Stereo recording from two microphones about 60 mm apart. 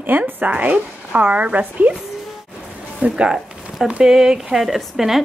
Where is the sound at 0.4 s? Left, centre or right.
Right.